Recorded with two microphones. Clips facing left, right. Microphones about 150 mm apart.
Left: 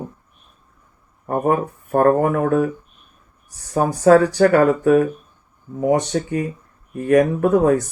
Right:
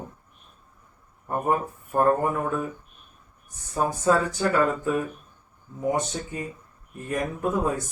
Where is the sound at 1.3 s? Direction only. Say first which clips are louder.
Left 6 dB; 75° left (ahead or behind).